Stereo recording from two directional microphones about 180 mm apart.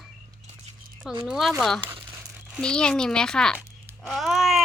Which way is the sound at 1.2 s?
Centre (ahead or behind).